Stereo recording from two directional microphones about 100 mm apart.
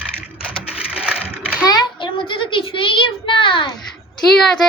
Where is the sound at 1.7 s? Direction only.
50° left (ahead or behind).